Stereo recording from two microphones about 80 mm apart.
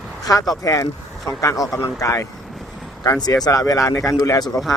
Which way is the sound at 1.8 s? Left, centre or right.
Left.